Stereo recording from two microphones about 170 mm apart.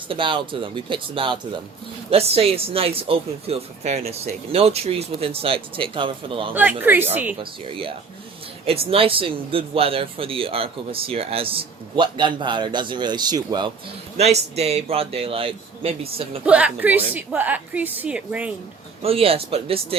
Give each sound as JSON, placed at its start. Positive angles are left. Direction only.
{"t": 0.1, "sound": "speech", "side_deg": -30}
{"t": 6.5, "sound": "a woman's voice", "side_deg": -10}
{"t": 7.3, "sound": "speech", "side_deg": -30}
{"t": 14.2, "sound": "speech", "side_deg": -40}
{"t": 16.5, "sound": "a woman's voice", "side_deg": -10}
{"t": 19.0, "sound": "speech", "side_deg": -35}